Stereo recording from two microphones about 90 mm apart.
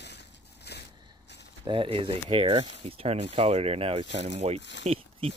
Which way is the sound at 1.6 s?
75° right (ahead or behind).